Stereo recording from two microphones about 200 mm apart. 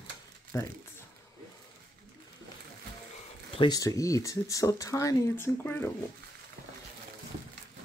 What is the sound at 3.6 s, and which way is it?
Speech, 20° left (ahead or behind).